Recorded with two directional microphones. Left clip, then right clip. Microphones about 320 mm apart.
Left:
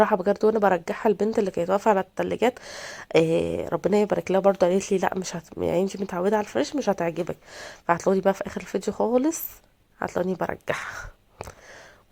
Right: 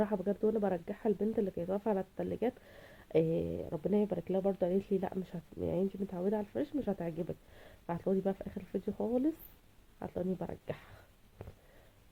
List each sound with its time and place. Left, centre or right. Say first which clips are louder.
0.0 s speech: left 13 dB; centre
3.4 s a woman's voice: left 12 dB; left
3.7 s speech: left 11 dB; centre
10.0 s speech: left 13 dB; centre